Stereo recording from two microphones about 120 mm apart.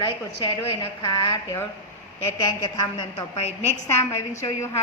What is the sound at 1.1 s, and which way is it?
Speech, 30° left (ahead or behind).